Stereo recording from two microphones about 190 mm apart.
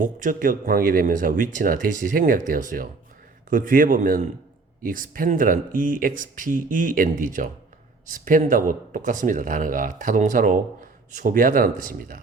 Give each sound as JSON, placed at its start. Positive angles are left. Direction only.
{"t": 0.0, "sound": "speech", "side_deg": -45}